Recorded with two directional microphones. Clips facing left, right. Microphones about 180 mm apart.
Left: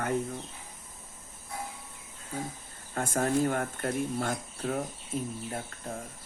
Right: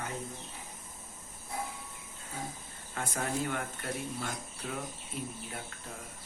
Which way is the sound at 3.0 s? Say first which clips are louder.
Left 7 dB; 45° left (ahead or behind).